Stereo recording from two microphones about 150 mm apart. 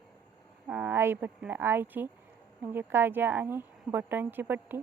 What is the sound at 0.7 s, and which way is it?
Speech, 15° right (ahead or behind).